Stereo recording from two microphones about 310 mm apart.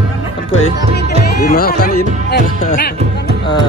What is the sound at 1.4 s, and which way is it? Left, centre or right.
Speech, left.